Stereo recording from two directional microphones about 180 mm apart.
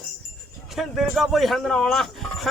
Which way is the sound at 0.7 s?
Centre (ahead or behind).